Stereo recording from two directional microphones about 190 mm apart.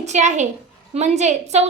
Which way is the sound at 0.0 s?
40° right (ahead or behind).